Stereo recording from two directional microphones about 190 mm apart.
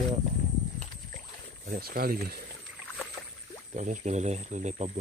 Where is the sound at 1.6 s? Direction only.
50° right (ahead or behind).